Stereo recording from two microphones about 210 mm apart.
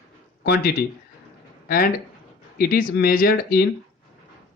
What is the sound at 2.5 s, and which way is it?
Speech, 45° left (ahead or behind).